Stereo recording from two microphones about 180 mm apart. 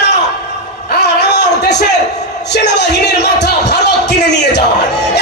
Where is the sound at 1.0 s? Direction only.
70° left (ahead or behind).